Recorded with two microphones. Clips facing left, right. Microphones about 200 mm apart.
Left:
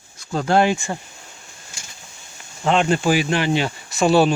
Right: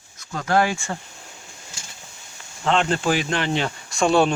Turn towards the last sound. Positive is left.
turn(degrees=5)  # may be behind; listen again after turning